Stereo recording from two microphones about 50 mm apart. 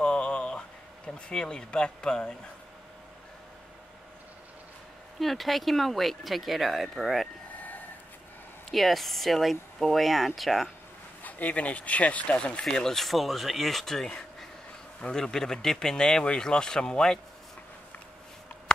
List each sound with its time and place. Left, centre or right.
0.0 s a sound: centre
5.2 s speech: centre
8.6 s speech: centre
11.2 s speech: left
12.7 s speech: centre